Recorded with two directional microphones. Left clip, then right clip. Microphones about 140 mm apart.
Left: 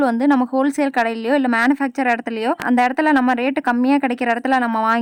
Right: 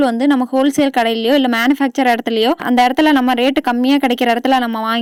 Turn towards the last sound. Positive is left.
turn(degrees=-25)  # may be behind; listen again after turning